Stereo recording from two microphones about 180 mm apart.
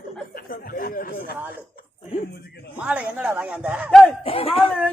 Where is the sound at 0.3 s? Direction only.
50° left (ahead or behind).